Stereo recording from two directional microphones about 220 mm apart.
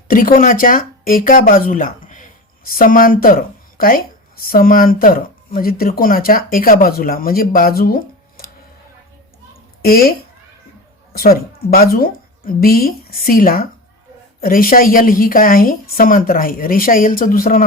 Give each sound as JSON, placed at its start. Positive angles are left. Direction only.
{"t": 0.1, "sound": "speech", "side_deg": 40}
{"t": 9.8, "sound": "a woman's voice", "side_deg": 45}